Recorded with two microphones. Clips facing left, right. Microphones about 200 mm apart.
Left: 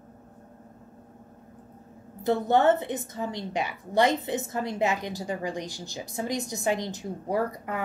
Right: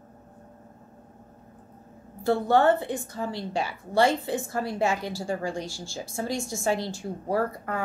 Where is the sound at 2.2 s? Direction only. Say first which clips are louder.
Right 1 dB; 20° left (ahead or behind).